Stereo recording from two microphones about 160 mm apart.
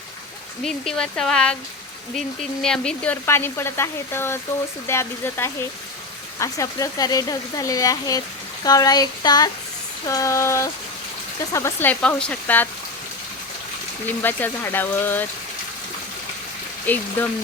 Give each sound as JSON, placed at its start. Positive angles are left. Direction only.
{"t": 0.6, "sound": "speech", "side_deg": 5}
{"t": 14.2, "sound": "speech", "side_deg": 10}
{"t": 16.8, "sound": "speech", "side_deg": 10}